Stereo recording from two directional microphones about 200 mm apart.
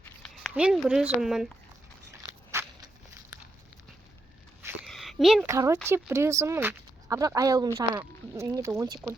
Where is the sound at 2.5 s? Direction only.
15° right (ahead or behind).